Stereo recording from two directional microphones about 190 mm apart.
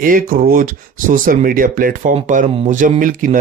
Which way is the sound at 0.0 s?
45° right (ahead or behind).